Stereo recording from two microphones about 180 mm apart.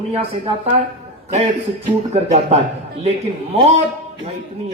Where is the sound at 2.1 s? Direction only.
35° right (ahead or behind).